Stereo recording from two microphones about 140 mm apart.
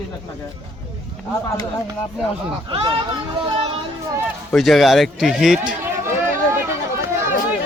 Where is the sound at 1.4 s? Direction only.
25° left (ahead or behind).